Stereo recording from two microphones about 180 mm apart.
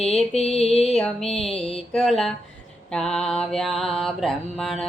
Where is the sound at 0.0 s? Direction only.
Centre (ahead or behind).